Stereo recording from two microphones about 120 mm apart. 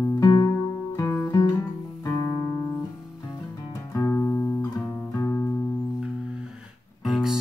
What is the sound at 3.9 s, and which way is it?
Music, 25° left (ahead or behind).